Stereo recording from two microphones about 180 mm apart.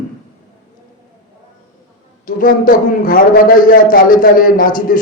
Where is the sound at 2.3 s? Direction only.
50° left (ahead or behind).